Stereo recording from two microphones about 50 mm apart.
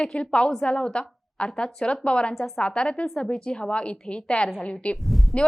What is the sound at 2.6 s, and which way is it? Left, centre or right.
A woman's voice, left.